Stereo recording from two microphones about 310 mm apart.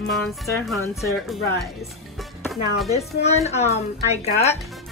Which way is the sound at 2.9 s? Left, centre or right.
Left.